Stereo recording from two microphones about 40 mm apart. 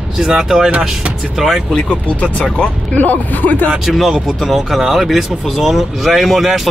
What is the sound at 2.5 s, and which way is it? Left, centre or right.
Speech, left.